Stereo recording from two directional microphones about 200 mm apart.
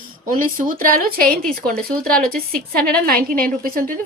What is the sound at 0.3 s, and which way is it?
A woman's voice, 45° right (ahead or behind).